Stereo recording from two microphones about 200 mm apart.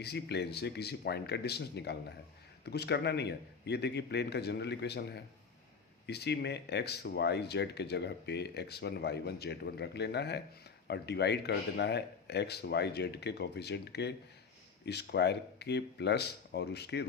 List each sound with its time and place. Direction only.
0.0 s speech: 55° left (ahead or behind)